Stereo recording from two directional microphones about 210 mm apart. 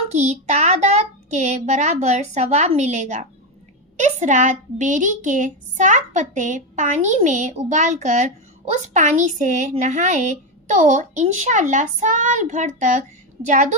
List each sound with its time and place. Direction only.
0.1 s a child's voice: 35° right (ahead or behind)